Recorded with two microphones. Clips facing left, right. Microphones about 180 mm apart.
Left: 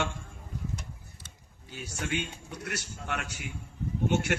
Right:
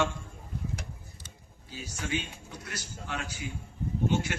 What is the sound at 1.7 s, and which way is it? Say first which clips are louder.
A man's voice: even; 65° left (ahead or behind).